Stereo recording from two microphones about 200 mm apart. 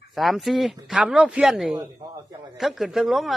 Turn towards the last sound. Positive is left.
turn(degrees=0)  # may be behind; listen again after turning